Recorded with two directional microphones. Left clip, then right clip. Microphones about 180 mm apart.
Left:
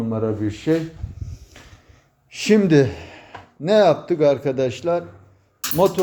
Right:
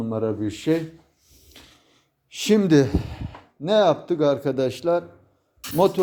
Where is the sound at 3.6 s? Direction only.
20° right (ahead or behind); by 6.0 s 35° right (ahead or behind).